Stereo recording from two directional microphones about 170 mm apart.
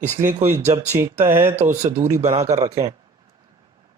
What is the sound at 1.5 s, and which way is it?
Speech, 45° right (ahead or behind).